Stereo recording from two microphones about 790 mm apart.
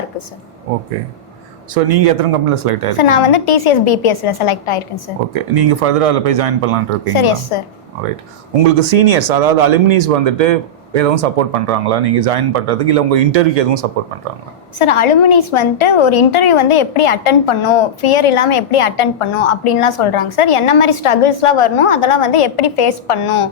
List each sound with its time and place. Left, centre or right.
1.7 s speech: right
3.0 s a woman's voice: left
5.5 s speech: right
7.2 s a woman's voice: left
8.9 s speech: right
14.8 s a woman's voice: left